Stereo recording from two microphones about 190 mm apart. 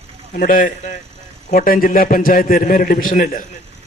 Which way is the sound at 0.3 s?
45° left (ahead or behind).